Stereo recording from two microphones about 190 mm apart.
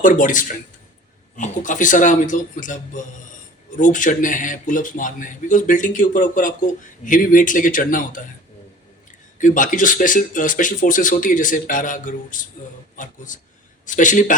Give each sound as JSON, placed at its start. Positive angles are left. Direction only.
{"t": 0.0, "sound": "speech", "side_deg": 45}
{"t": 9.4, "sound": "speech", "side_deg": 45}